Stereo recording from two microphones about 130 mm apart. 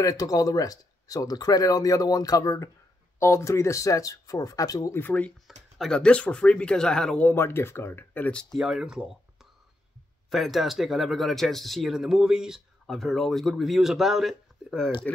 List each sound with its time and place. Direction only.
0.0 s speech: 25° left (ahead or behind); by 7.2 s 5° left (ahead or behind)
7.2 s speech: 20° left (ahead or behind)
8.5 s speech: 5° right (ahead or behind)